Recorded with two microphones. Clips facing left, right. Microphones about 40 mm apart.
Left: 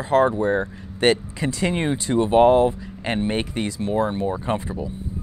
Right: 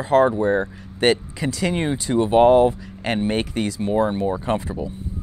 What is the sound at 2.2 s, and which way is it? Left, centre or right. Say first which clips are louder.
Speech: right 1 dB; centre.